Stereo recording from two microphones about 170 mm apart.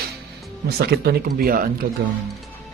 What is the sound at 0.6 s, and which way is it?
Speech, 70° right (ahead or behind).